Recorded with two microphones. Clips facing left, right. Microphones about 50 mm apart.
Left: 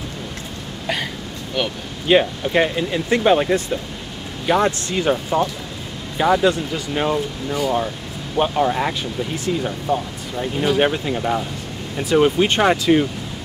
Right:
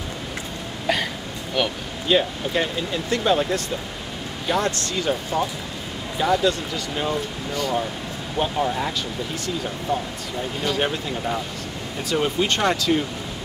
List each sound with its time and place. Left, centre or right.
0.9 s hiccup: centre
1.6 s speech: centre
2.0 s speech: left
7.5 s speech: centre
8.4 s speech: left
10.6 s speech: centre